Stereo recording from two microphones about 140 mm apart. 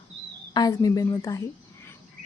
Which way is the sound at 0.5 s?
25° left (ahead or behind).